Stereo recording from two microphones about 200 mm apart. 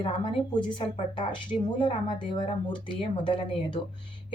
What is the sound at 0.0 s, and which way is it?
Speech, 25° left (ahead or behind).